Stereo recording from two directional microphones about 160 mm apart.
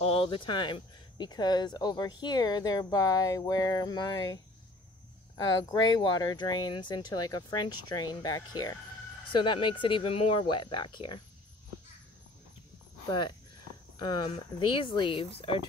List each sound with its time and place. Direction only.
0.0 s speech: 35° left (ahead or behind)
5.5 s speech: 25° left (ahead or behind)
13.9 s speech: 30° left (ahead or behind)